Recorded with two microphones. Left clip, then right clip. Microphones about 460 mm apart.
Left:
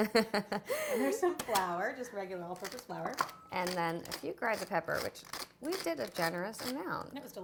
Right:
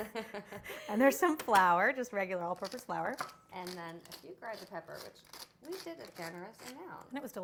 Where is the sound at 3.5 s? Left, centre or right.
Left.